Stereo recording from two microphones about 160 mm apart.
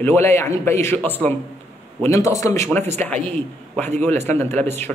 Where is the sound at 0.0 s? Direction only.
15° left (ahead or behind).